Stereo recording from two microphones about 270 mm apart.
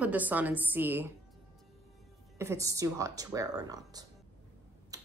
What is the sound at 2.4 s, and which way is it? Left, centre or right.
Speech, centre.